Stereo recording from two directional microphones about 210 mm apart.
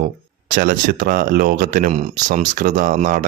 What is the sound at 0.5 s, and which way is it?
Speech, 40° right (ahead or behind).